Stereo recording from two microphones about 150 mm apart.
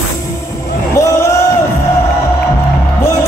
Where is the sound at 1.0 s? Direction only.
20° left (ahead or behind).